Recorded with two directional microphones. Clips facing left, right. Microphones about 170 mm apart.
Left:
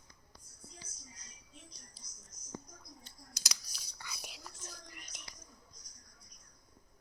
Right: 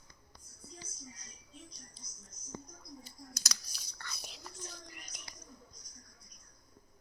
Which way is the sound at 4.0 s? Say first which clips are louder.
Right 1 dB; 10° left (ahead or behind).